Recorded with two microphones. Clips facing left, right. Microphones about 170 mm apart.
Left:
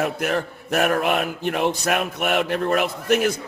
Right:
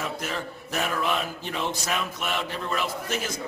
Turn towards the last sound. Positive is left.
turn(degrees=60)  # may be behind; listen again after turning